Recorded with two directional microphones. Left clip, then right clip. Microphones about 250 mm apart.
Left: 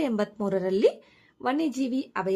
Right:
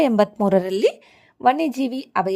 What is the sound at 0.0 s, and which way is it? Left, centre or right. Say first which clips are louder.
A woman's voice: right 10 dB; right.